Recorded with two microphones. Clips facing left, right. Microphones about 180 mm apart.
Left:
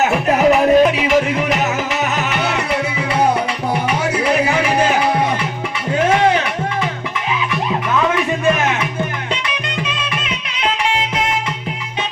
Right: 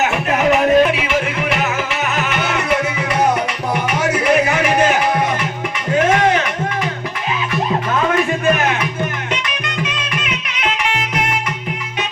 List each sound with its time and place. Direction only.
0.0 s music: 35° left (ahead or behind)
3.8 s music: 30° left (ahead or behind)
6.1 s music: 30° left (ahead or behind)
9.8 s music: 30° left (ahead or behind)